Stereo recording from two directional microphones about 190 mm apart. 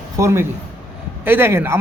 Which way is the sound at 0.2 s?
15° right (ahead or behind).